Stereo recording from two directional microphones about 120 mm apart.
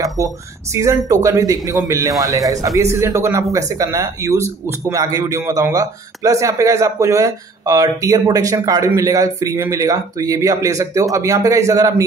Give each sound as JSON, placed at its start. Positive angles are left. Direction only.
{"t": 0.2, "sound": "a man's voice", "side_deg": -25}